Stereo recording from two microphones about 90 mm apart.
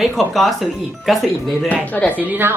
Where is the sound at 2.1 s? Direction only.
20° right (ahead or behind).